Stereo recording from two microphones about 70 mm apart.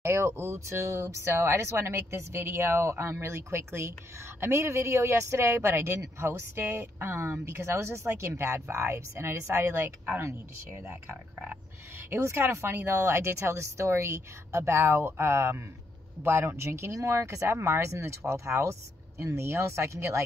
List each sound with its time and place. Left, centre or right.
0.0 s speech: right
12.1 s speech: right